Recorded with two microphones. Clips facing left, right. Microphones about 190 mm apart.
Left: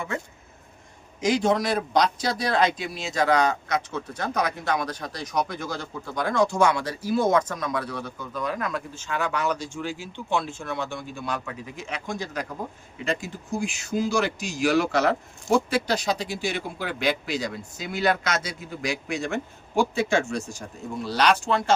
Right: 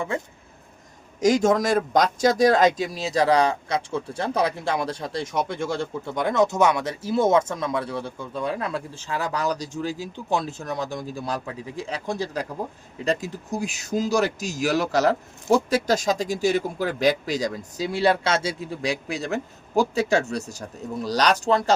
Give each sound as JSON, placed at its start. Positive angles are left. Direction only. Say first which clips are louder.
{"t": 1.2, "sound": "speech", "louder": "right 3 dB", "side_deg": -45}